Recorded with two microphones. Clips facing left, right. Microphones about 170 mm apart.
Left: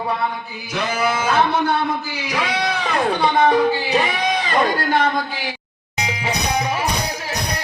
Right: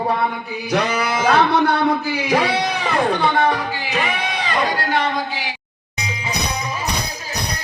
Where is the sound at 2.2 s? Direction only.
45° right (ahead or behind).